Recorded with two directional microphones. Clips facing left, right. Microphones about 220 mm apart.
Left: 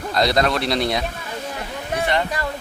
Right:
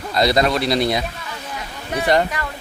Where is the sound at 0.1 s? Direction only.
Centre (ahead or behind).